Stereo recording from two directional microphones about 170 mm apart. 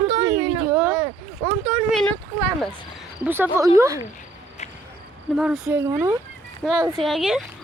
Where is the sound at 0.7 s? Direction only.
10° right (ahead or behind).